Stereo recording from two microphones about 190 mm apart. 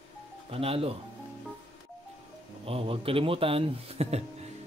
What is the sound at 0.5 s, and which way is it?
Speech, 30° right (ahead or behind).